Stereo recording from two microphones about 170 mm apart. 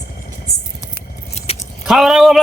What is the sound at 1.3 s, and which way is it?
Keys jangling, 35° left (ahead or behind).